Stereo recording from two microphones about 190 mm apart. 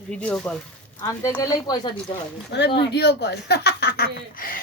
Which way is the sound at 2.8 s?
60° left (ahead or behind).